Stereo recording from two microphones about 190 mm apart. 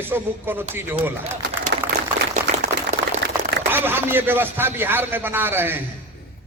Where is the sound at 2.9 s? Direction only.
40° right (ahead or behind).